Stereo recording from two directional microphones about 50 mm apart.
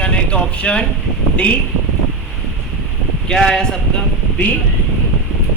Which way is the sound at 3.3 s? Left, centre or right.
Centre.